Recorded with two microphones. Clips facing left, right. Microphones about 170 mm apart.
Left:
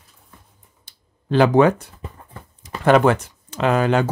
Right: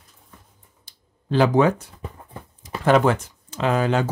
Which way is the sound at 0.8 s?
65° left (ahead or behind).